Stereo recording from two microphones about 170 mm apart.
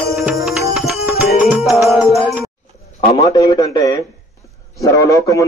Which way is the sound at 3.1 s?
20° left (ahead or behind).